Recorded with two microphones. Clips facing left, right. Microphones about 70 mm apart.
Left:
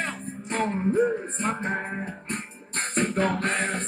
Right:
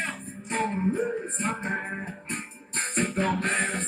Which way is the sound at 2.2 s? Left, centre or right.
Left.